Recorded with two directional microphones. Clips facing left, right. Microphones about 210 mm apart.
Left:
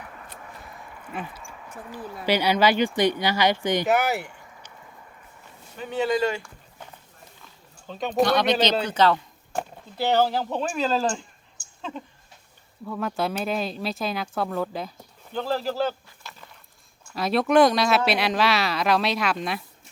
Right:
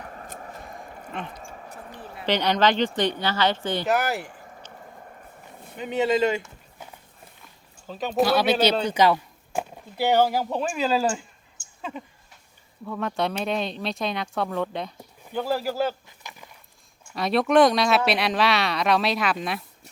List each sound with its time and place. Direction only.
0.0 s a sound: 40° right (ahead or behind)
1.1 s speech: 5° left (ahead or behind)
1.4 s a sound: 40° right (ahead or behind)
2.2 s speech: 10° left (ahead or behind)
3.8 s speech: centre (ahead or behind)
4.3 s a sound: 45° right (ahead or behind)
4.7 s vehicle: 50° right (ahead or behind)
5.7 s speech: 20° right (ahead or behind)
7.9 s speech: centre (ahead or behind)
15.3 s speech: 10° right (ahead or behind)
17.2 s speech: centre (ahead or behind)